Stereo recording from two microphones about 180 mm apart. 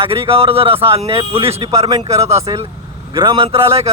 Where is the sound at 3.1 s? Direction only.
30° right (ahead or behind).